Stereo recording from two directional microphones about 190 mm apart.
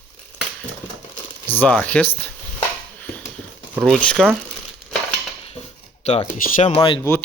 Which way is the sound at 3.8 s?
5° left (ahead or behind).